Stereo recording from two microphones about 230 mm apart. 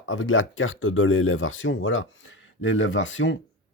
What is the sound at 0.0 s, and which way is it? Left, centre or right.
Speech, left.